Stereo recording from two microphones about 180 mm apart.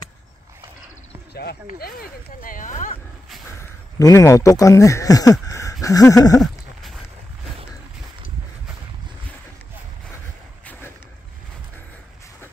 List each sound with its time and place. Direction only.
1.3 s speech: 65° left (ahead or behind); by 3.0 s 45° left (ahead or behind)
3.6 s speech: 20° left (ahead or behind)
6.4 s a sound: centre (ahead or behind)